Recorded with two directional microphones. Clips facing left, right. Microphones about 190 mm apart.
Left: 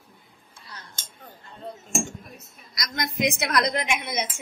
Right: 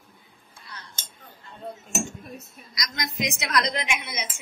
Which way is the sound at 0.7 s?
40° left (ahead or behind).